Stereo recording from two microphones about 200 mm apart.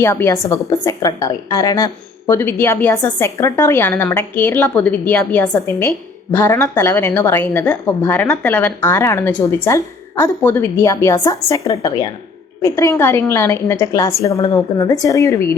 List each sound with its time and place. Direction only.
0.0 s a woman's voice: 10° left (ahead or behind)